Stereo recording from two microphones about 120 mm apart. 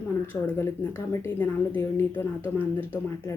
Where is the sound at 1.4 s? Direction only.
15° left (ahead or behind).